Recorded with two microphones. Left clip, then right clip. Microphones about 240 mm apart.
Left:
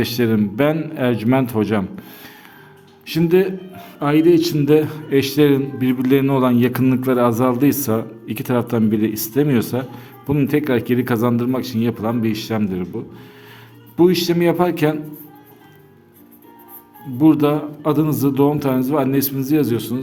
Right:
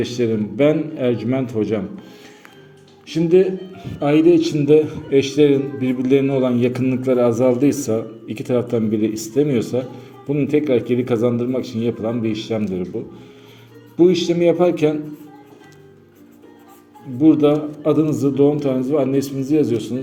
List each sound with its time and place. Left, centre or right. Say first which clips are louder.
0.0 s a man's voice: left 1 dB; left
3.1 s a man's voice: right 1 dB; left
13.9 s a man's voice: even; left
17.2 s a man's voice: right 1 dB; left